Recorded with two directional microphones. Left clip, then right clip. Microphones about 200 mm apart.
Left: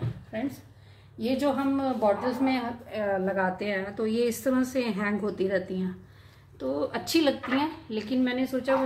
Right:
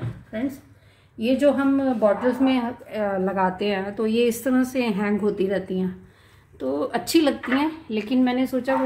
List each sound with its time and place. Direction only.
1.1 s a woman's voice: 40° right (ahead or behind)